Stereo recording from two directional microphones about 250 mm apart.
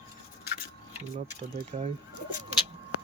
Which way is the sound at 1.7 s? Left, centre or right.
Right.